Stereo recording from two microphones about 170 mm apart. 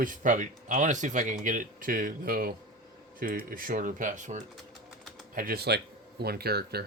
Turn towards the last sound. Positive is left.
turn(degrees=-70)  # may be behind; listen again after turning